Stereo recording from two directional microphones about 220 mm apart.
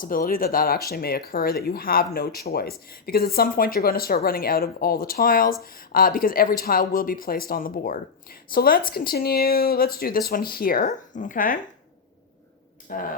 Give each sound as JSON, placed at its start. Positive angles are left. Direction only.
{"t": 0.0, "sound": "speech", "side_deg": 40}
{"t": 12.9, "sound": "speech", "side_deg": 40}